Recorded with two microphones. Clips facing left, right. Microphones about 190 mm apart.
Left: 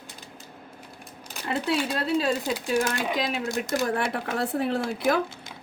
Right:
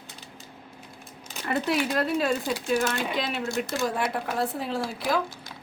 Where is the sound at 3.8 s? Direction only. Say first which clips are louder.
Even; 65° left (ahead or behind).